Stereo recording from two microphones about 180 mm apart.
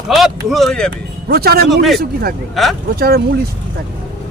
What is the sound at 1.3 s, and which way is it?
Speech, 60° right (ahead or behind).